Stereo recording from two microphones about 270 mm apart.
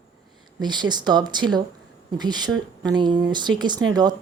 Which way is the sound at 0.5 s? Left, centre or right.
Centre.